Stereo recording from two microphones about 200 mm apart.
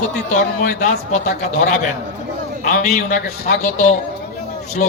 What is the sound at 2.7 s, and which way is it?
A man's voice, 40° left (ahead or behind).